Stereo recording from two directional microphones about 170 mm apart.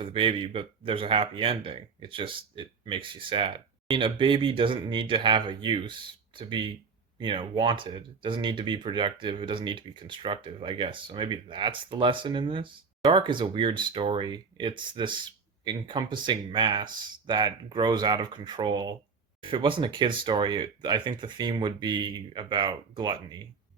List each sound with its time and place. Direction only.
0.0 s speech: 30° right (ahead or behind)